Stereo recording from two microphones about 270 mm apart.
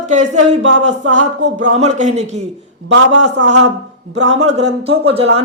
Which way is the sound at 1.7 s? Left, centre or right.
Right.